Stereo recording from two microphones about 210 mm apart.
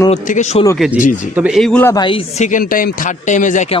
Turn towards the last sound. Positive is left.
turn(degrees=35)  # may be behind; listen again after turning